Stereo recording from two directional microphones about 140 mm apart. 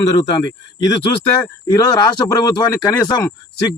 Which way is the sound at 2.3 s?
25° left (ahead or behind).